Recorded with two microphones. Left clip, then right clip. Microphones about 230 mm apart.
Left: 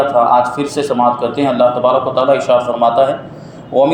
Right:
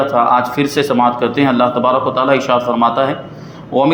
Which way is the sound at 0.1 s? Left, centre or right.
Right.